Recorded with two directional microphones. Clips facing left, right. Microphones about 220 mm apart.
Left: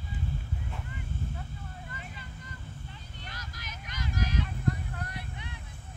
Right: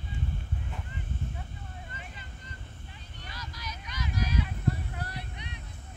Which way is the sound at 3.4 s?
50° left (ahead or behind).